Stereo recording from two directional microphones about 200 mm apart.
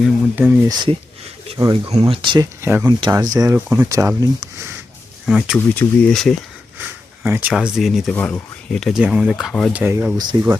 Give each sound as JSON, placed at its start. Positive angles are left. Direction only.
{"t": 0.0, "sound": "speech", "side_deg": -5}
{"t": 0.7, "sound": "speech", "side_deg": -20}
{"t": 2.6, "sound": "speech", "side_deg": -10}
{"t": 5.2, "sound": "speech", "side_deg": -5}
{"t": 5.7, "sound": "speech", "side_deg": 10}
{"t": 7.2, "sound": "speech", "side_deg": -10}
{"t": 10.3, "sound": "speech", "side_deg": -20}